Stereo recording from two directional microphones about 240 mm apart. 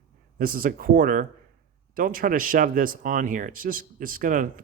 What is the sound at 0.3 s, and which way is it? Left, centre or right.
Speech, right.